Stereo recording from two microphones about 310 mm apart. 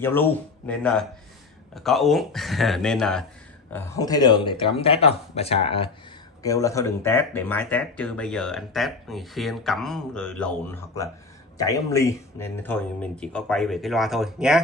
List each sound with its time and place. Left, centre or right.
0.0 s speech: centre